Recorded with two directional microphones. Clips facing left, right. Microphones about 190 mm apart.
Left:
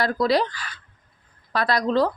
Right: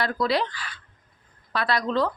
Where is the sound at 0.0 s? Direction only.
40° left (ahead or behind).